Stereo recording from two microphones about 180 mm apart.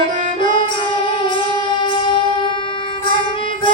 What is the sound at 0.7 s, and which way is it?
Music, 25° left (ahead or behind).